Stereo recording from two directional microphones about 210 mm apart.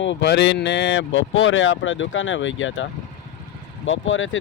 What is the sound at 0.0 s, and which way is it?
Speech, 60° left (ahead or behind).